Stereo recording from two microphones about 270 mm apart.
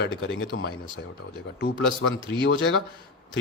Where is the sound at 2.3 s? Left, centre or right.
Left.